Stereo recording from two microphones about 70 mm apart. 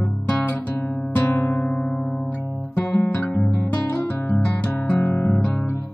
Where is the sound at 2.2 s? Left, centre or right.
Left.